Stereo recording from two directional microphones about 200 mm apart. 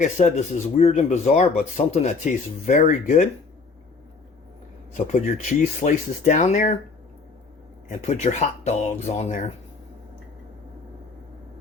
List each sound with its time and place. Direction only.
0.0 s speech: 35° left (ahead or behind)
5.0 s speech: 40° left (ahead or behind)
7.9 s speech: 35° left (ahead or behind)